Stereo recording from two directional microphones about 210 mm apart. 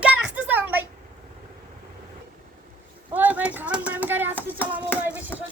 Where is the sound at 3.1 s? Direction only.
10° right (ahead or behind).